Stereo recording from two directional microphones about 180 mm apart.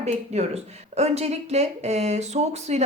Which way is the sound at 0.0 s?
35° right (ahead or behind).